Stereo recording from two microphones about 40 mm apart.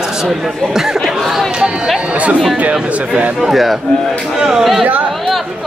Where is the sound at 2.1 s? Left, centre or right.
Right.